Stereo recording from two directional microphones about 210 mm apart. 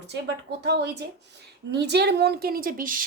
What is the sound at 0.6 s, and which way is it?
A woman's voice, 50° right (ahead or behind).